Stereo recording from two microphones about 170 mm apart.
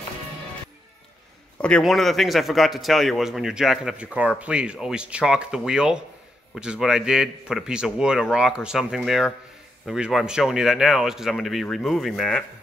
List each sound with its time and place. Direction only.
1.6 s a man's voice: 5° left (ahead or behind)